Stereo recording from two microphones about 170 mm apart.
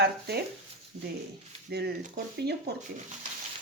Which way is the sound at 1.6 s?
75° right (ahead or behind).